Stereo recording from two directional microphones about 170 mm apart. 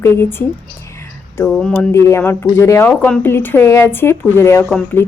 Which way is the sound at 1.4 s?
5° left (ahead or behind).